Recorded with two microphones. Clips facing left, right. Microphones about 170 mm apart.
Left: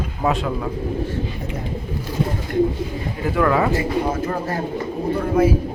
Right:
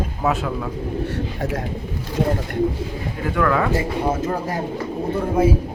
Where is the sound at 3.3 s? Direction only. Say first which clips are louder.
Left 1 dB; 10° left (ahead or behind).